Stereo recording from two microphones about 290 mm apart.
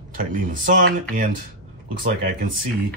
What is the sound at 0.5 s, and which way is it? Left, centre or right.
Speech, right.